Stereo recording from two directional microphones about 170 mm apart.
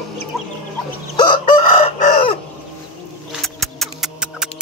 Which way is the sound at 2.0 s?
40° left (ahead or behind).